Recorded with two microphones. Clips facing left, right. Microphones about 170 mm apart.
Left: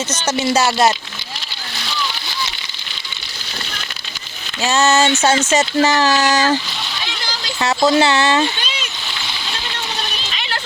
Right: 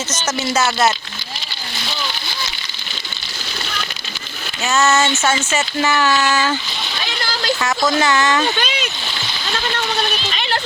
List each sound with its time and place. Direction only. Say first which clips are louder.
0.3 s speech: left 3 dB; 30° left (ahead or behind)
4.6 s speech: left 2 dB; 35° left (ahead or behind)
7.6 s speech: left 5 dB; 30° left (ahead or behind)
8.5 s a sound: right 6 dB; 55° right (ahead or behind)